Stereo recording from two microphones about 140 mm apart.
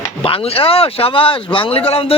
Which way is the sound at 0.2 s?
45° left (ahead or behind).